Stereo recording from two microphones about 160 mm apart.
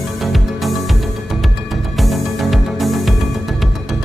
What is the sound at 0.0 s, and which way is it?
Music, centre (ahead or behind).